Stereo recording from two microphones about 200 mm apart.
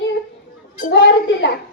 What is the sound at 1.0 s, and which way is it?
Speech, 60° left (ahead or behind).